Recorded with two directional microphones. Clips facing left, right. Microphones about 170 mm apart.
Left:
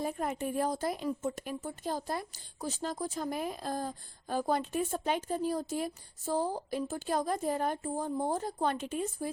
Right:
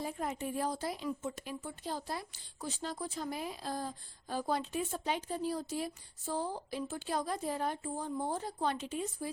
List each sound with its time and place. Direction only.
0.0 s a woman's voice: 50° left (ahead or behind)